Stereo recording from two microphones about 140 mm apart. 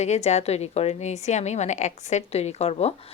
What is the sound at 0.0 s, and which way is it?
Speech, 55° left (ahead or behind).